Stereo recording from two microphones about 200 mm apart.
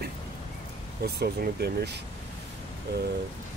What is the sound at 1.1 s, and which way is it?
Speech, 55° right (ahead or behind).